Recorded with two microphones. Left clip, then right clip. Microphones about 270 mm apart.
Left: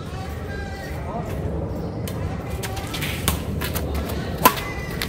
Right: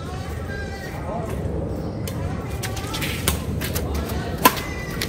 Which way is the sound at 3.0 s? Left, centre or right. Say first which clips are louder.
Right 1 dB; centre.